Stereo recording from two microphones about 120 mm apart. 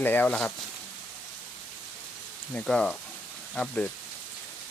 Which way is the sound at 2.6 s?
10° left (ahead or behind).